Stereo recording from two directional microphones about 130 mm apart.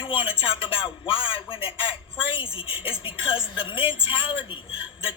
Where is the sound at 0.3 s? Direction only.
40° left (ahead or behind).